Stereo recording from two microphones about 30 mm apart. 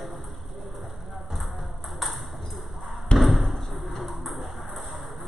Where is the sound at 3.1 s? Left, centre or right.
Centre.